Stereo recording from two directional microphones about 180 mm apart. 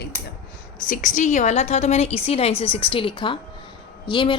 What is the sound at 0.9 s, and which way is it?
A woman's voice, 45° left (ahead or behind).